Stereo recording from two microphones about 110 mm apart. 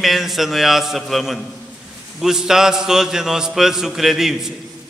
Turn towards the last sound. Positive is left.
turn(degrees=-5)  # may be behind; listen again after turning